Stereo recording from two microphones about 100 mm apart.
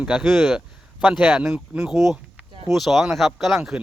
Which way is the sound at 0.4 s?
5° right (ahead or behind).